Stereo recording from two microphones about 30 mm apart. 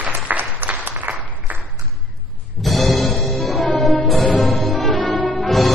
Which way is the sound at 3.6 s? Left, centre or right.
Left.